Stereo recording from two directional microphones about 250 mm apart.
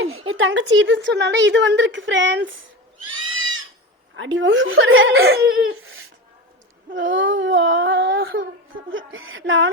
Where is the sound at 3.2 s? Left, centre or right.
Right.